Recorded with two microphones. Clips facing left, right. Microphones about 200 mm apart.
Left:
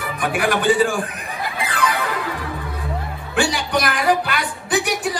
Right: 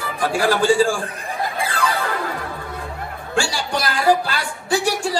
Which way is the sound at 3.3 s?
30° right (ahead or behind).